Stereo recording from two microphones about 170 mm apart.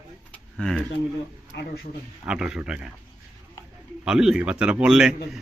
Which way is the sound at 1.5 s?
70° left (ahead or behind).